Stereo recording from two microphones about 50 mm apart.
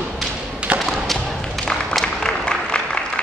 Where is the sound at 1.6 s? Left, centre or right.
Centre.